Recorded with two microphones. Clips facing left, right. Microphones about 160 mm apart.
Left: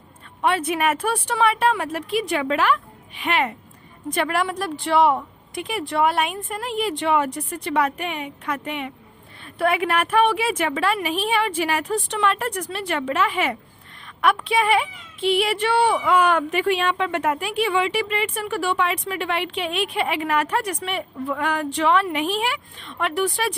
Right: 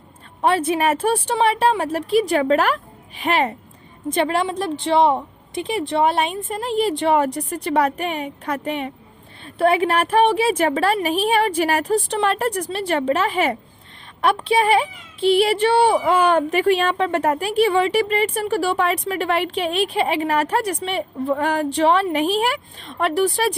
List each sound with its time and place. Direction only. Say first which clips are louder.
0.4 s speech: right 3 dB; 30° right (ahead or behind)